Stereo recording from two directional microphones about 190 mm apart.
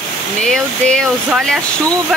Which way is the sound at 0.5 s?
5° left (ahead or behind).